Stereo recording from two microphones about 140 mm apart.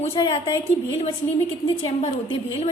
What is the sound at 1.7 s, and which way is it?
Speech, 40° left (ahead or behind).